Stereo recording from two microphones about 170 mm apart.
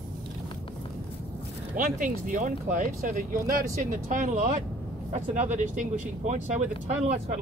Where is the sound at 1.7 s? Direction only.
50° right (ahead or behind).